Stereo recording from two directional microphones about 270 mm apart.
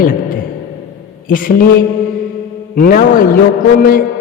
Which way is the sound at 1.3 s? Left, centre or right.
Left.